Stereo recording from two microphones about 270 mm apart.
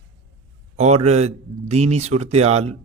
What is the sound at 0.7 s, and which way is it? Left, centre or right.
Speech, right.